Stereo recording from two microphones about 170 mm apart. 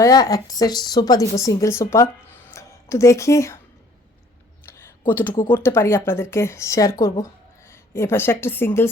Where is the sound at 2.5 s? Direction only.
15° left (ahead or behind).